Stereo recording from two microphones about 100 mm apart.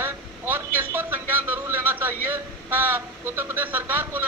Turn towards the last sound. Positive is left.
turn(degrees=-20)  # may be behind; listen again after turning